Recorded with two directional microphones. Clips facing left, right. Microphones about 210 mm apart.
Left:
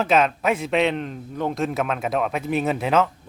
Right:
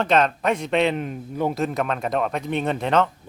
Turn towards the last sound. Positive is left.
turn(degrees=5)  # may be behind; listen again after turning